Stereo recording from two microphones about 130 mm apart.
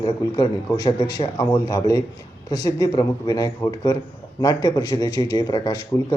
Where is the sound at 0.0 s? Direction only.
30° left (ahead or behind).